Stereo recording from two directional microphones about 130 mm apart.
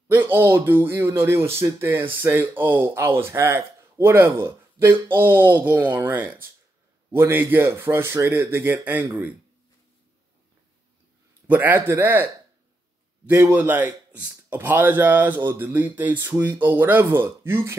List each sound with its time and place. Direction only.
0.1 s speech: 15° right (ahead or behind)
11.4 s speech: 15° right (ahead or behind)
13.3 s speech: 15° right (ahead or behind)